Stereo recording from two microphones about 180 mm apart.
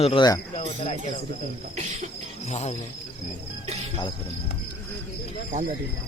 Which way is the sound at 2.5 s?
40° left (ahead or behind).